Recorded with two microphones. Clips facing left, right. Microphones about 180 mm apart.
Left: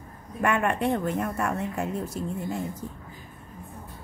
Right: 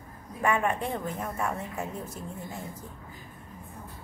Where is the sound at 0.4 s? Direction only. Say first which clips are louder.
Left 2 dB; 70° left (ahead or behind).